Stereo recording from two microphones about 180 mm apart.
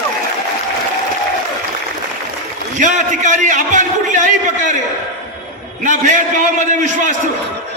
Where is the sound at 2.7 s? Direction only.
45° right (ahead or behind).